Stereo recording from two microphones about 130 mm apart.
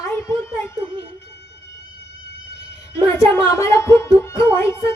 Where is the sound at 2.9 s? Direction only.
20° left (ahead or behind).